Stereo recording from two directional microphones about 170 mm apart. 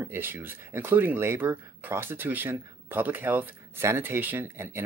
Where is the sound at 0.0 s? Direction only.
10° right (ahead or behind).